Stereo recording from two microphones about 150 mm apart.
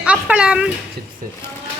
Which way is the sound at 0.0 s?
10° right (ahead or behind).